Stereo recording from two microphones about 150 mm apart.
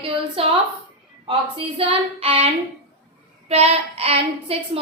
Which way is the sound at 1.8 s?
40° right (ahead or behind).